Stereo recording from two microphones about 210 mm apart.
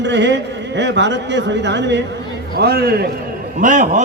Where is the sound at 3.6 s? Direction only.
40° right (ahead or behind).